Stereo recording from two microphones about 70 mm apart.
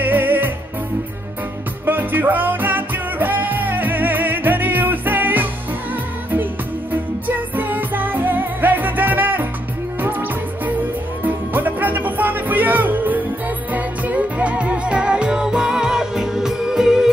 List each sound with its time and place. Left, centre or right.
0.0 s music: right
1.9 s music: right
6.9 s music: right; by 17.1 s centre